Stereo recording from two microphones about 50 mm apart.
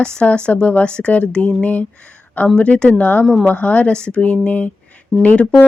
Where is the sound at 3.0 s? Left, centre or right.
Left.